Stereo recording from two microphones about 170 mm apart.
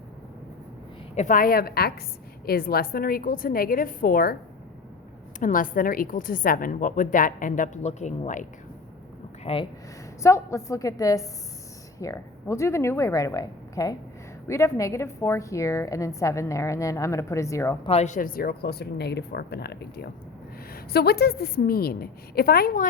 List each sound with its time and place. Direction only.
1.1 s a woman's voice: 45° left (ahead or behind)
5.4 s a woman's voice: 50° left (ahead or behind)
9.4 s speech: 35° left (ahead or behind)
10.2 s a woman's voice: 15° left (ahead or behind)
17.8 s a woman's voice: 40° left (ahead or behind); by 22.9 s 55° left (ahead or behind)